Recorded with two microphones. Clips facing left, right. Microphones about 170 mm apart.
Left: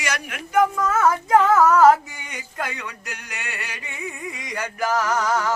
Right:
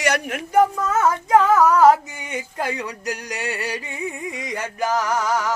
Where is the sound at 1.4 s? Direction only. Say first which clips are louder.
Even; 15° right (ahead or behind).